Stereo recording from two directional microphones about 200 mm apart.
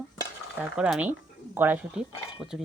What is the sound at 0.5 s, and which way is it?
Speech, 5° right (ahead or behind).